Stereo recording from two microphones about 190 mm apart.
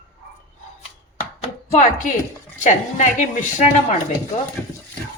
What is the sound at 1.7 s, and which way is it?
A woman's voice, 40° left (ahead or behind).